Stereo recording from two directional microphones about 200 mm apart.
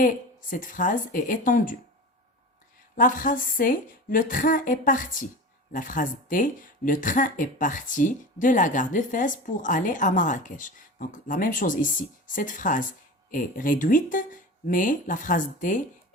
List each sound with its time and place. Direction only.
0.5 s speech: 40° left (ahead or behind)
2.9 s a woman's voice: 45° left (ahead or behind)